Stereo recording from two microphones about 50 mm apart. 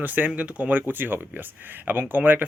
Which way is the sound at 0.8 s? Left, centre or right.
Right.